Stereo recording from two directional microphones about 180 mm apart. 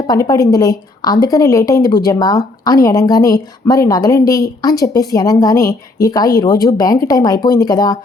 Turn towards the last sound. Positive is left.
turn(degrees=20)  # may be behind; listen again after turning